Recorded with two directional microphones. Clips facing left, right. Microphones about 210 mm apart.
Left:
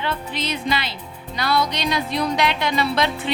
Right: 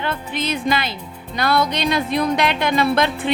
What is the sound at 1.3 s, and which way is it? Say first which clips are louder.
Speech: right 3 dB; 55° right (ahead or behind).